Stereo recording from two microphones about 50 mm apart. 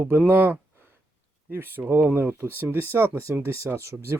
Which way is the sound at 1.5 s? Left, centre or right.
Right.